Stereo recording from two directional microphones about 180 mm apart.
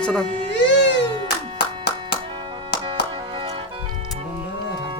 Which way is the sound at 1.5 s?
65° left (ahead or behind).